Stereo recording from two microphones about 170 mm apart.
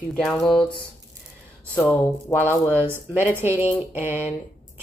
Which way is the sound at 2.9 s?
10° right (ahead or behind).